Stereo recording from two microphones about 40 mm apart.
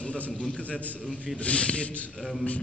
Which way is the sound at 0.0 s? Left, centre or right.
Left.